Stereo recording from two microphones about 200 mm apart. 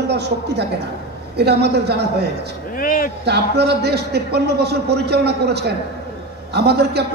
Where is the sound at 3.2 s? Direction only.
55° right (ahead or behind).